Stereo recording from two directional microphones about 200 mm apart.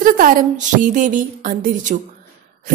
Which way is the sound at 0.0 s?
40° right (ahead or behind).